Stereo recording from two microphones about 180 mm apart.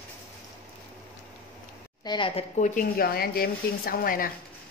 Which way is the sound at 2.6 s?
45° left (ahead or behind).